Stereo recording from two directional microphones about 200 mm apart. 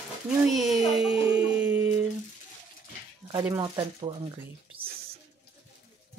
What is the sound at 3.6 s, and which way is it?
Speech, 25° right (ahead or behind).